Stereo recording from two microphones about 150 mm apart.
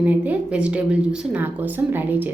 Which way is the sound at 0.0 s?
10° right (ahead or behind).